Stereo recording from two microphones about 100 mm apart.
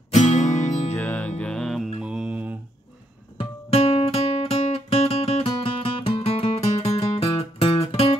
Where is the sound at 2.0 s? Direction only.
10° right (ahead or behind).